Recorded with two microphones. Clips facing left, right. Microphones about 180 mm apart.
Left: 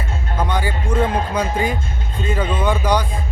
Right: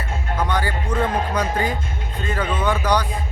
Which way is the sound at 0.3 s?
10° left (ahead or behind).